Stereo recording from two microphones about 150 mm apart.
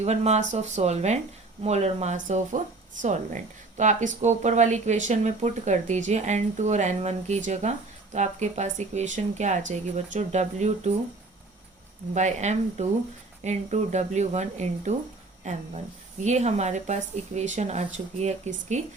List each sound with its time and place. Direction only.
0.0 s a woman's voice: 45° right (ahead or behind)
12.1 s a woman's voice: 50° right (ahead or behind)